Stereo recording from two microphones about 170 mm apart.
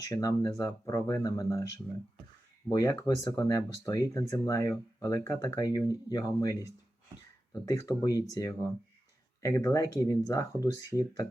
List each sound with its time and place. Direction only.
0.0 s speech: 20° left (ahead or behind)
2.6 s speech: 20° left (ahead or behind)
7.6 s speech: 20° left (ahead or behind)